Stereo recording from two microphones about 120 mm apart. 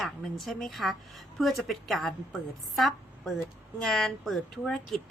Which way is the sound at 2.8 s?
Centre (ahead or behind).